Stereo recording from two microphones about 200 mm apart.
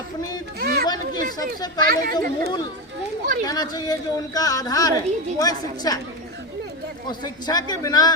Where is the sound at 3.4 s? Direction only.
20° left (ahead or behind).